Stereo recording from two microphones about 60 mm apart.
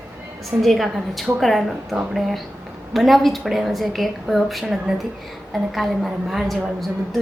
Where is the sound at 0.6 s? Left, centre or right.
Centre.